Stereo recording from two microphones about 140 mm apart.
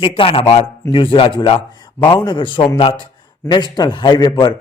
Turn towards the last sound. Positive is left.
turn(degrees=30)  # may be behind; listen again after turning